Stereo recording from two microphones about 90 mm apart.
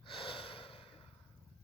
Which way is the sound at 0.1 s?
75° left (ahead or behind).